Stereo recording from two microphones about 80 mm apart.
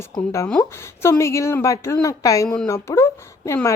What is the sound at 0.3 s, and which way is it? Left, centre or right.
Speech, left.